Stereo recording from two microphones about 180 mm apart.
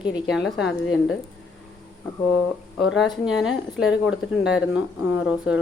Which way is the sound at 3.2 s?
5° right (ahead or behind).